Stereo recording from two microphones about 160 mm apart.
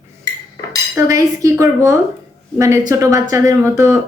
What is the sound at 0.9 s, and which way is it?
Speech, 20° right (ahead or behind).